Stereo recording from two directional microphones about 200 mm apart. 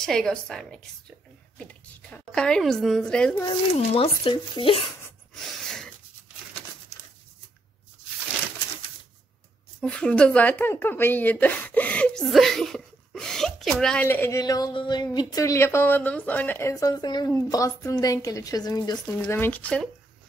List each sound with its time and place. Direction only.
0.0 s a woman's voice: centre (ahead or behind)
2.1 s a woman's voice: 5° left (ahead or behind)
3.9 s speech: 30° left (ahead or behind)
5.3 s a sound: centre (ahead or behind)
9.8 s speech: 5° left (ahead or behind)